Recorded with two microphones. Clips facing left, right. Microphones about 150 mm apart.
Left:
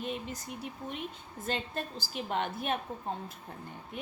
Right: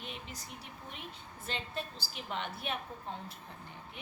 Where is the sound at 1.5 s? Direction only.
50° left (ahead or behind).